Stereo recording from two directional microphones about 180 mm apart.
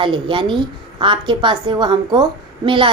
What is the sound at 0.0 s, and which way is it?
A child's voice, 25° right (ahead or behind).